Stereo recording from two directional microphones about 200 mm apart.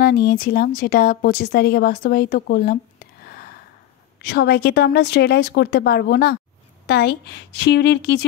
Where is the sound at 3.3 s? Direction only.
50° left (ahead or behind).